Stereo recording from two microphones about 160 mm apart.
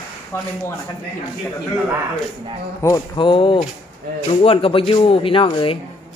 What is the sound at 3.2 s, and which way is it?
Speech, 30° left (ahead or behind).